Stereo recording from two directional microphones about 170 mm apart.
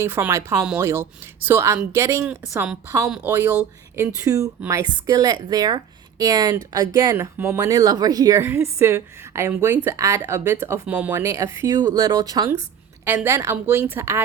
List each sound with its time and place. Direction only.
0.0 s a woman's voice: 15° right (ahead or behind)
2.5 s a woman's voice: 5° right (ahead or behind)